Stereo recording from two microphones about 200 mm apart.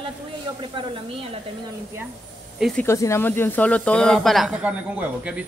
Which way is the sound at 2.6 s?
Centre (ahead or behind).